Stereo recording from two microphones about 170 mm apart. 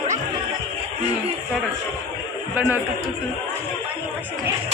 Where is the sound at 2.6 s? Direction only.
10° right (ahead or behind).